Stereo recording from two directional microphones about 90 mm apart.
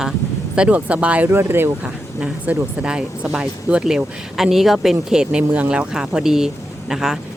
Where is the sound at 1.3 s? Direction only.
25° right (ahead or behind).